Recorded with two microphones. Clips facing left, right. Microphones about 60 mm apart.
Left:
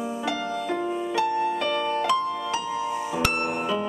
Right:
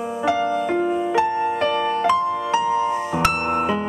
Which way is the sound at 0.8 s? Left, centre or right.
Right.